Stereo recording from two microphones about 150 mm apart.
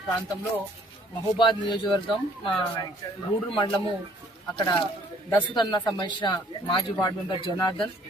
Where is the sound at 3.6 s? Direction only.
30° left (ahead or behind).